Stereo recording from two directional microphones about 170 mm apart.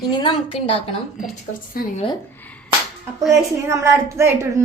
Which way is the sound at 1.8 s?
60° left (ahead or behind).